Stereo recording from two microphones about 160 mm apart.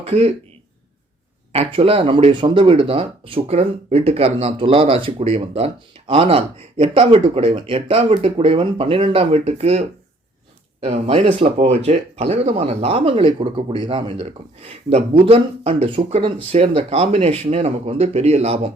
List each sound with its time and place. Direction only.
0.0 s speech: 40° right (ahead or behind)
1.5 s speech: 40° right (ahead or behind)
10.8 s speech: 45° right (ahead or behind)